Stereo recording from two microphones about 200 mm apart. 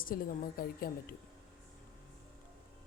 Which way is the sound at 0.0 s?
45° left (ahead or behind).